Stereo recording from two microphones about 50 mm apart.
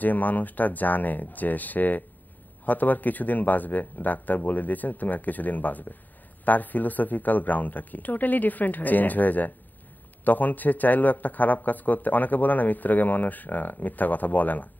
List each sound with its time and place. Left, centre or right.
0.0 s a man's voice: left